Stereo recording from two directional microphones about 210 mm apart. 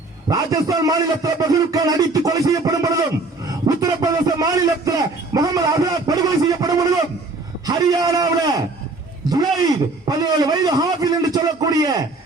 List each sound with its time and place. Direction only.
0.3 s a man's voice: 15° right (ahead or behind)